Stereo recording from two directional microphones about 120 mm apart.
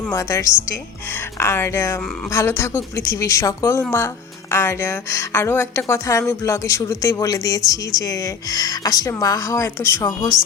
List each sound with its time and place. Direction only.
0.1 s speech: 25° left (ahead or behind)